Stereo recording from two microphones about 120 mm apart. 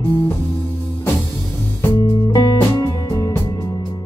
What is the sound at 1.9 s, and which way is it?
Music, 35° left (ahead or behind).